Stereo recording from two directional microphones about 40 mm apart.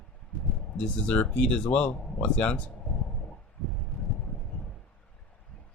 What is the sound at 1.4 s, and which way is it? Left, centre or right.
Speech, left.